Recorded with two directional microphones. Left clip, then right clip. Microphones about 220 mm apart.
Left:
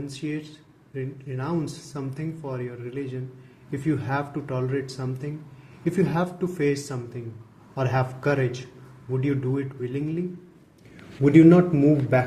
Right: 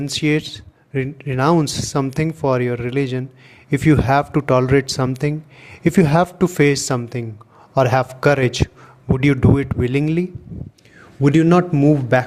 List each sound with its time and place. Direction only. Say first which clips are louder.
0.0 s speech: right 13 dB; 50° right (ahead or behind)